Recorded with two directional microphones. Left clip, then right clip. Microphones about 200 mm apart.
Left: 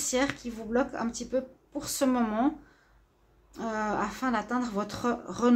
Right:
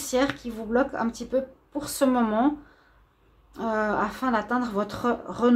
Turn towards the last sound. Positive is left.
turn(degrees=-5)  # may be behind; listen again after turning